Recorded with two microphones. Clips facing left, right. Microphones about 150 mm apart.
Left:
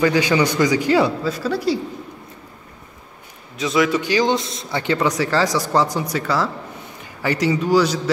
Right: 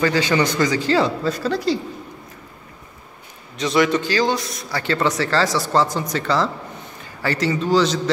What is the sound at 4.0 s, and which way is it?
Speech, 15° left (ahead or behind).